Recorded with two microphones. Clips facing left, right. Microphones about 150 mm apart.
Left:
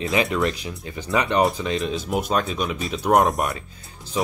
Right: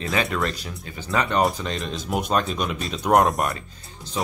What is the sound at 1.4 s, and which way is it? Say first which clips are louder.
Speech: left 2 dB; 5° left (ahead or behind).